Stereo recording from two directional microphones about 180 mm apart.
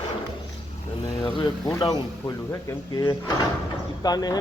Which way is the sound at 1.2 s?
25° left (ahead or behind).